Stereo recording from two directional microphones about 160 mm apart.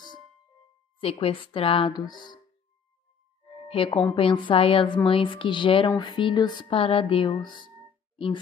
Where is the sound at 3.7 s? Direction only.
35° left (ahead or behind).